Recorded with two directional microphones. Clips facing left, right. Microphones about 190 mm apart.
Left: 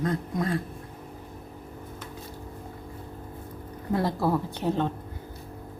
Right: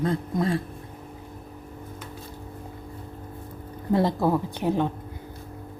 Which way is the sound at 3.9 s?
20° right (ahead or behind).